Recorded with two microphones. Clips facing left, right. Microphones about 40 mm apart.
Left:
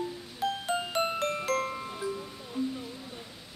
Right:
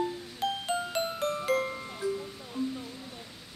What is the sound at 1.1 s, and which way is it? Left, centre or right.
Music, left.